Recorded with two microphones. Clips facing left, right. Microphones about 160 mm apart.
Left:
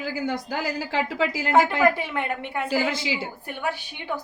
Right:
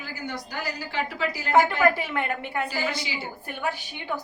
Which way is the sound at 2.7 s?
90° left.